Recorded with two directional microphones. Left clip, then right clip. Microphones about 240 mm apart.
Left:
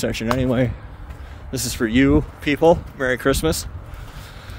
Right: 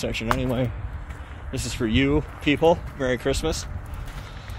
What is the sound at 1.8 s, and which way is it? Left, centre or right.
Speech, left.